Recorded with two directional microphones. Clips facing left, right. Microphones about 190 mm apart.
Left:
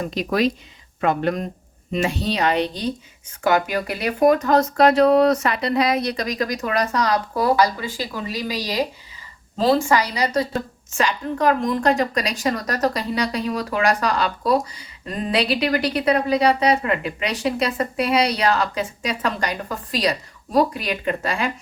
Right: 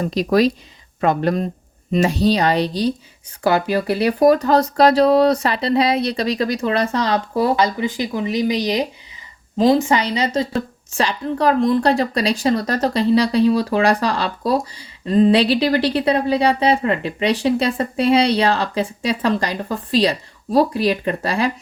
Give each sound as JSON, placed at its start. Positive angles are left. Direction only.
{"t": 0.0, "sound": "a woman's voice", "side_deg": -35}